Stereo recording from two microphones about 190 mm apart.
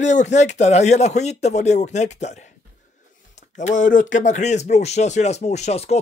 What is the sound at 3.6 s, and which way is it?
Speech, 40° left (ahead or behind).